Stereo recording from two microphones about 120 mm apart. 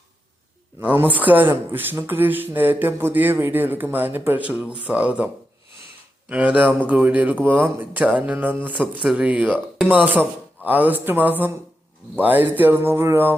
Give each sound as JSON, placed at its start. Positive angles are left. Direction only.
{"t": 0.8, "sound": "speech", "side_deg": -15}
{"t": 10.0, "sound": "speech", "side_deg": -15}